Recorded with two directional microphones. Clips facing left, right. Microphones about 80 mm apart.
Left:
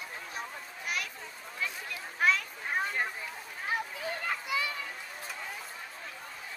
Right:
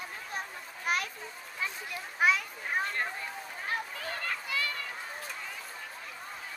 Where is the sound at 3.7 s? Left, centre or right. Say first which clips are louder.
Left 2 dB; centre.